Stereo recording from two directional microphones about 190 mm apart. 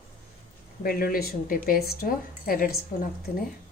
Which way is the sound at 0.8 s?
50° left (ahead or behind).